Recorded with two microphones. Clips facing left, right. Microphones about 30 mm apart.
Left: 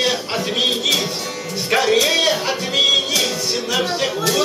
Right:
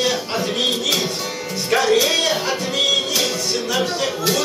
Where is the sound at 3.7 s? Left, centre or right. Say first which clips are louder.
Left 2 dB; centre.